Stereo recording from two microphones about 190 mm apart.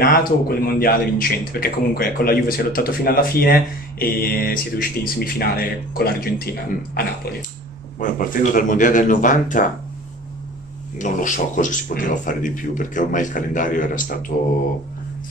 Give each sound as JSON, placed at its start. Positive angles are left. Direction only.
{"t": 0.0, "sound": "a man's voice", "side_deg": 45}
{"t": 8.0, "sound": "a man's voice", "side_deg": 45}
{"t": 11.0, "sound": "a man's voice", "side_deg": 40}